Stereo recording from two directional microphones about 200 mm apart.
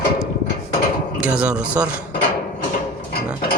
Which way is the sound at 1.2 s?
5° right (ahead or behind).